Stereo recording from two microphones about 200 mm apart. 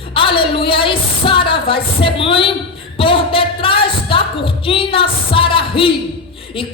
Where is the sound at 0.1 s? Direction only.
25° left (ahead or behind).